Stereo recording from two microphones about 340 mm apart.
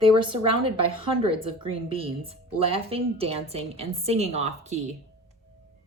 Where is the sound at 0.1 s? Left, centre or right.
Centre.